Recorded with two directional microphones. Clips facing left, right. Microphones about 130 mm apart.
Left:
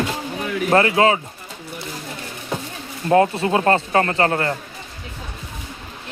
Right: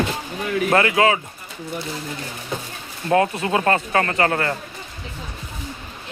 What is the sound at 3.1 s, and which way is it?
Speech, 30° left (ahead or behind).